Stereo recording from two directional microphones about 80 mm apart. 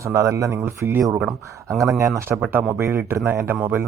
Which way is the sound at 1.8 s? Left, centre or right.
Right.